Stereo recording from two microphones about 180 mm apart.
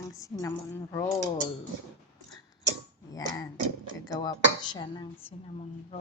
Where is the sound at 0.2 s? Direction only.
20° left (ahead or behind).